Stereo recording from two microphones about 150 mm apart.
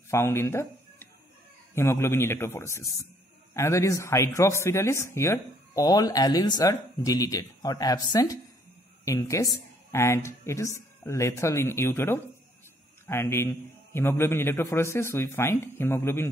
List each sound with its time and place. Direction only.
0.1 s a man's voice: 15° left (ahead or behind)